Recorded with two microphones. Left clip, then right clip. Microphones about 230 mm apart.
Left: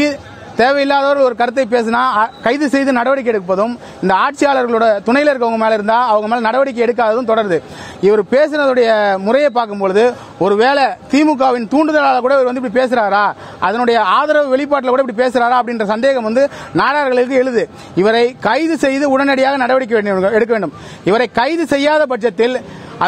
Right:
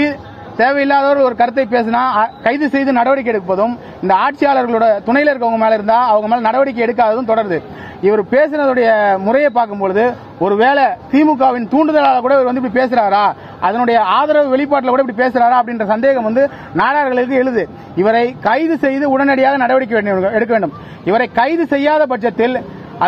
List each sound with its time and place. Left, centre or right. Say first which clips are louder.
0.0 s a man's voice: left 1 dB; left